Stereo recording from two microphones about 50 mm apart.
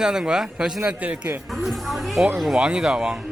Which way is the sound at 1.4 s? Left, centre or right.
Centre.